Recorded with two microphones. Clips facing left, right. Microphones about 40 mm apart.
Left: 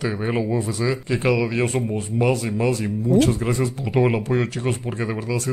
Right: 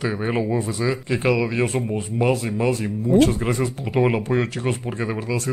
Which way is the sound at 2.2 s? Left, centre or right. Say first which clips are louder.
Even; right.